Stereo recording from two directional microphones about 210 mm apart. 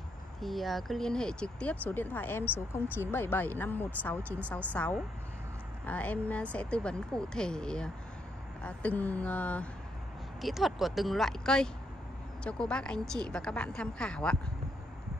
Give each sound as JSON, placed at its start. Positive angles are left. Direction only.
{"t": 0.4, "sound": "speech", "side_deg": 0}